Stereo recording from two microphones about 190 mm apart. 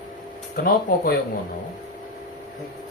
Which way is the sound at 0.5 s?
50° left (ahead or behind).